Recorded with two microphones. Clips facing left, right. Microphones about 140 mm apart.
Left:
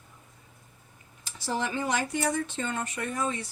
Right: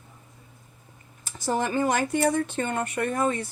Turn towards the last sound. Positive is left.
turn(degrees=-55)  # may be behind; listen again after turning